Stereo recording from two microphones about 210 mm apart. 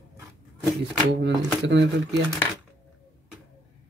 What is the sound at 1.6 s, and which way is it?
Speech, 60° right (ahead or behind).